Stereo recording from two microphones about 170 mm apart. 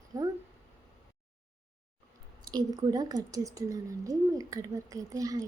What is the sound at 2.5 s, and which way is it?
A woman's voice, 25° right (ahead or behind).